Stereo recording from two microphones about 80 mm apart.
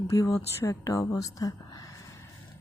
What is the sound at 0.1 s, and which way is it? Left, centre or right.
Speech, left.